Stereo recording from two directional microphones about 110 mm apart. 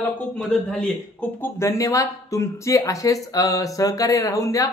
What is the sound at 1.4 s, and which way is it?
Speech, 30° left (ahead or behind).